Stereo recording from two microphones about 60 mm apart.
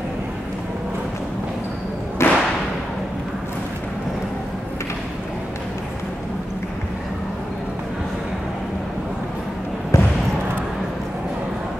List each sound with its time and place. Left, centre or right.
2.2 s whip: left
9.9 s basketball bounce: left